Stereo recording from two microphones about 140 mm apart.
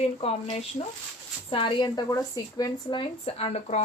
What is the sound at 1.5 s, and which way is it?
Speech, 35° left (ahead or behind).